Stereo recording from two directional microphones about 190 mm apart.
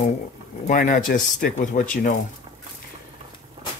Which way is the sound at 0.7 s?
40° left (ahead or behind).